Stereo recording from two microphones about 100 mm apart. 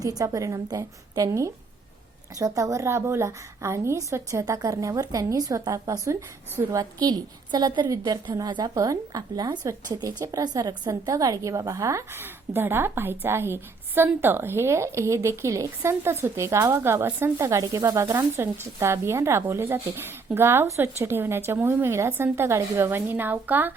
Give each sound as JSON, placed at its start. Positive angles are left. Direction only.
{"t": 0.0, "sound": "a woman's voice", "side_deg": -35}
{"t": 6.1, "sound": "a woman's voice", "side_deg": -30}
{"t": 7.0, "sound": "a woman's voice", "side_deg": -45}
{"t": 17.4, "sound": "a woman's voice", "side_deg": -35}